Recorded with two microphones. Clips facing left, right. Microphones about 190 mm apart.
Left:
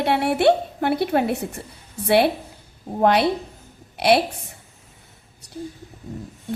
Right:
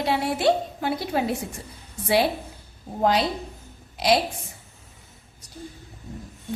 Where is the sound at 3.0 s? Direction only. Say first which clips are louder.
Left 4 dB; 60° left (ahead or behind).